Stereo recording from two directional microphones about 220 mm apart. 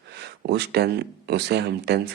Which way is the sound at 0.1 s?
50° right (ahead or behind).